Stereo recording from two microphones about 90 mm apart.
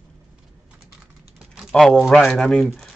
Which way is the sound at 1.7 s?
5° left (ahead or behind).